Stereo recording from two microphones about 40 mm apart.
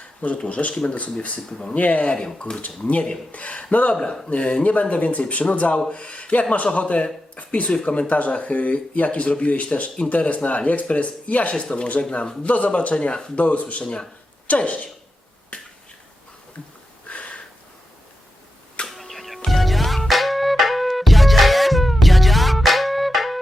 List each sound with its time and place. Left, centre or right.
0.4 s speech: left
1.7 s speech: left
7.7 s speech: left
11.5 s speech: left
13.3 s speech: left
14.4 s speech: left
15.5 s finger snapping: left
17.1 s a sound: left
18.9 s a sound: centre
19.5 s music: centre